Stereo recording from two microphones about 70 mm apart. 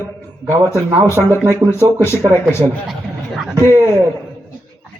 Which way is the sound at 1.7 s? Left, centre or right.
Left.